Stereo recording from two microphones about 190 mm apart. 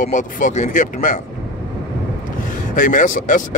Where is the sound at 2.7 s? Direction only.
45° left (ahead or behind).